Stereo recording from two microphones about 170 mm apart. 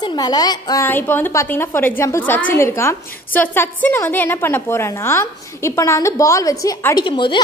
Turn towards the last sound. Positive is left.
turn(degrees=30)  # may be behind; listen again after turning